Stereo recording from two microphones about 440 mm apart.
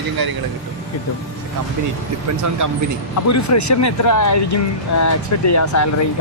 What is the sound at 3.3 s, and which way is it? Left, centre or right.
Speech, left.